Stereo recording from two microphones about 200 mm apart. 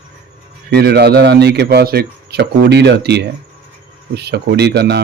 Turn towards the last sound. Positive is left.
turn(degrees=-55)  # may be behind; listen again after turning